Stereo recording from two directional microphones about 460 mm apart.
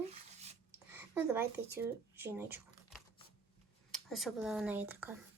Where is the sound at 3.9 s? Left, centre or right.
Centre.